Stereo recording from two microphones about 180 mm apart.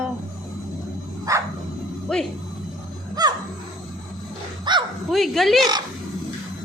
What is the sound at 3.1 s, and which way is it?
Music, 20° right (ahead or behind).